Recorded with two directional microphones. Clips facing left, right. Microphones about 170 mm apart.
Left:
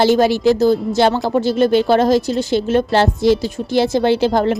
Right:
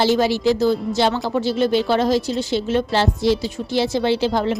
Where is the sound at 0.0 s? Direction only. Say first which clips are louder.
Left 4 dB; 50° left (ahead or behind).